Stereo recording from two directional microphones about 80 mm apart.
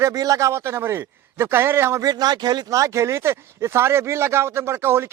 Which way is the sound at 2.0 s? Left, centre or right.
Right.